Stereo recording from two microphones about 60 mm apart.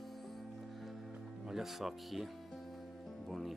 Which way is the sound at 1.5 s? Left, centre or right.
Centre.